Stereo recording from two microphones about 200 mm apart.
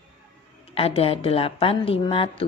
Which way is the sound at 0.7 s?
30° left (ahead or behind).